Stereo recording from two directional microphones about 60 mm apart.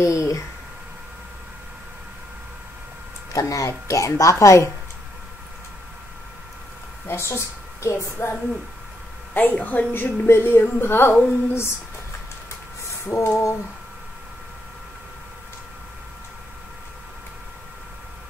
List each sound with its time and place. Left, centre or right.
0.0 s speech: left
3.3 s a woman's voice: left
7.1 s speech: left
9.3 s a woman's voice: left
10.0 s speech: left
12.8 s speech: left